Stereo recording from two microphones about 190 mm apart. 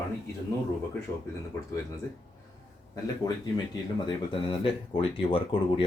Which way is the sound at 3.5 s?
25° left (ahead or behind).